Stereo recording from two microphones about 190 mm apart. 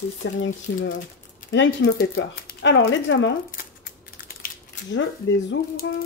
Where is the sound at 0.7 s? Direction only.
65° left (ahead or behind).